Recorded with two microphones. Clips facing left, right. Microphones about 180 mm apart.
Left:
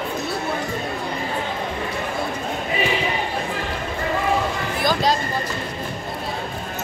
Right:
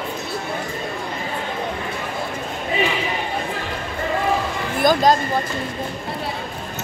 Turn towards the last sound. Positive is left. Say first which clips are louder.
# right 5 dB
turn(degrees=-50)  # may be behind; listen again after turning